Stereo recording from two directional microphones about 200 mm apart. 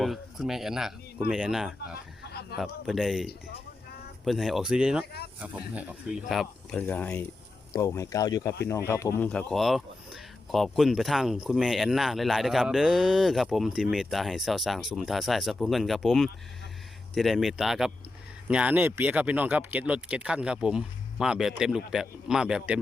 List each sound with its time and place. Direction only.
0.0 s speech: centre (ahead or behind)
2.2 s a sound: 55° left (ahead or behind)
2.6 s speech: centre (ahead or behind)
4.3 s speech: centre (ahead or behind)